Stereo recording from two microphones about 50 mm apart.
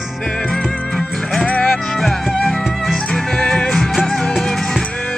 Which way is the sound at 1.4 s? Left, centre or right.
Left.